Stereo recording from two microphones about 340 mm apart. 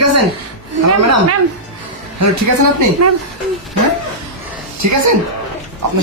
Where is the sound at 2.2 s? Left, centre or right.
Right.